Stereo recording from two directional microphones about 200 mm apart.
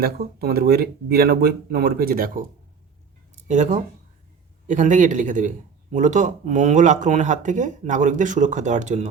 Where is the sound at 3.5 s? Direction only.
35° right (ahead or behind).